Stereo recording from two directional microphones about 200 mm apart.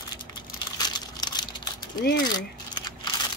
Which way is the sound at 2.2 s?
20° left (ahead or behind).